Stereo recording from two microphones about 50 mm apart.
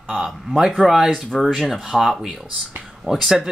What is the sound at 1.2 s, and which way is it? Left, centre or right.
Speech, centre.